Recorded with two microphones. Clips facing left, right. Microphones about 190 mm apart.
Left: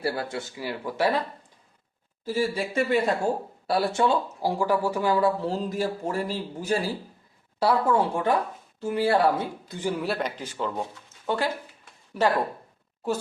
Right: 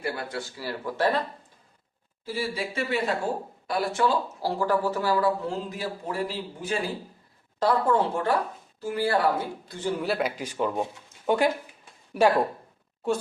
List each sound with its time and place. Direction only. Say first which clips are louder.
0.0 s speech: left 3 dB; 30° left (ahead or behind); by 1.2 s 10° left (ahead or behind)
2.2 s a man's voice: left 4 dB; 45° left (ahead or behind)
3.7 s speech: left 2 dB; 30° left (ahead or behind)
5.5 s a man's voice: left 4 dB; 40° left (ahead or behind)
7.6 s speech: left 1 dB; 10° left (ahead or behind)
8.8 s speech: left 2 dB; 25° left (ahead or behind)
10.0 s speech: right 1 dB; 5° right (ahead or behind)